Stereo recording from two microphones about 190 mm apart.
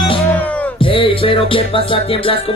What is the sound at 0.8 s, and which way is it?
Music, 25° left (ahead or behind).